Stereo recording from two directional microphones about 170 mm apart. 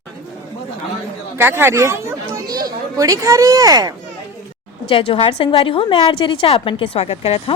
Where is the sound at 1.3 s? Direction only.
15° right (ahead or behind).